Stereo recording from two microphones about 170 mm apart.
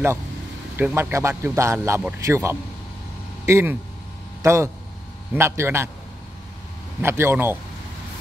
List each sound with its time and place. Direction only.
0.7 s a man's voice: 10° right (ahead or behind)
7.0 s a man's voice: 15° right (ahead or behind)